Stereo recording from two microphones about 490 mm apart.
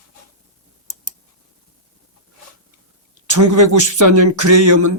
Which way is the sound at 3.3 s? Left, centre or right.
Right.